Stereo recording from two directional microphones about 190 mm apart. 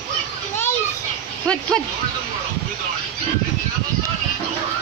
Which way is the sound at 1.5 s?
5° left (ahead or behind).